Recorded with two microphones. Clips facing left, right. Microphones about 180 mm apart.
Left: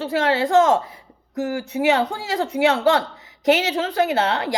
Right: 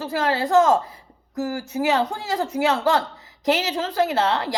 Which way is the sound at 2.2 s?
30° left (ahead or behind).